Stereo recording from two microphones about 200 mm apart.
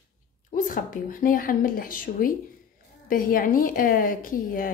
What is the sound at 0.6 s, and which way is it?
Speech, 45° left (ahead or behind).